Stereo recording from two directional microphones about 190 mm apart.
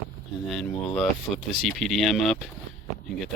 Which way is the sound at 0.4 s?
Centre (ahead or behind).